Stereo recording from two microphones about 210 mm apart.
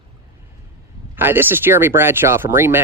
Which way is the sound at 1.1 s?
10° right (ahead or behind).